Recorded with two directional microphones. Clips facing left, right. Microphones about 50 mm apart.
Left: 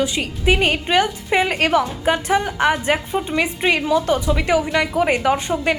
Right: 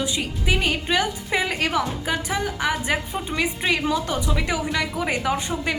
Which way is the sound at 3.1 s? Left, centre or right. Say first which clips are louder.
Left 5 dB; centre.